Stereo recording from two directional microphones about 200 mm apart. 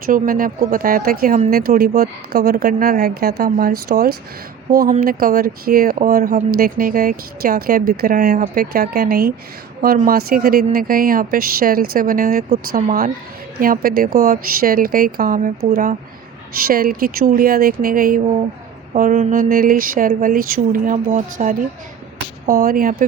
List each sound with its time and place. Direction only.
0.1 s speech: 45° right (ahead or behind)